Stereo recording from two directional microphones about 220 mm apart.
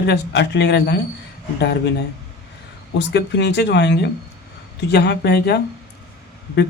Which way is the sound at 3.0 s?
50° left (ahead or behind).